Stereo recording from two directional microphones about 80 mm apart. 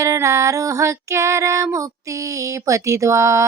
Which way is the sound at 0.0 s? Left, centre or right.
Right.